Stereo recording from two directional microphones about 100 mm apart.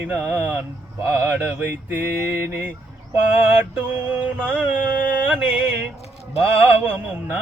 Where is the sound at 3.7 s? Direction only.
20° right (ahead or behind).